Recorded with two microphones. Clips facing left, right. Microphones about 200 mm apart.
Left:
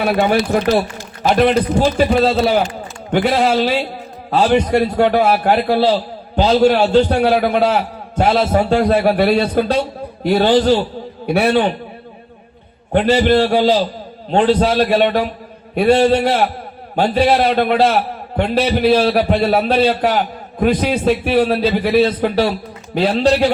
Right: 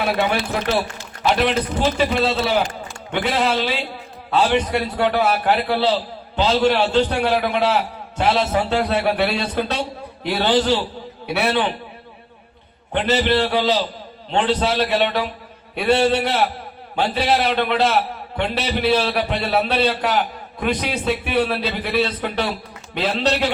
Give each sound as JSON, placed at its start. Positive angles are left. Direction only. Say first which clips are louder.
{"t": 0.0, "sound": "a man's voice", "louder": "left 5 dB", "side_deg": 45}
{"t": 13.1, "sound": "a man's voice", "louder": "left 4 dB", "side_deg": 45}
{"t": 19.8, "sound": "a man's voice", "louder": "left 5 dB", "side_deg": 30}
{"t": 20.1, "sound": "a man's voice", "louder": "left 4 dB", "side_deg": 45}
{"t": 23.0, "sound": "a man's voice", "louder": "left 6 dB", "side_deg": 35}